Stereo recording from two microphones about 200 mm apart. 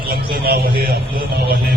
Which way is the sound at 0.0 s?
50° right (ahead or behind).